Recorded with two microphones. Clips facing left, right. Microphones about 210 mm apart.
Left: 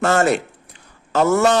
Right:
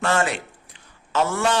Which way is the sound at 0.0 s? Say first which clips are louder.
Left 6 dB; 40° left (ahead or behind).